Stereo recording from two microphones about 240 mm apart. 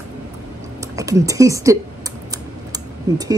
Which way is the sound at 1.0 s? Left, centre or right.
Centre.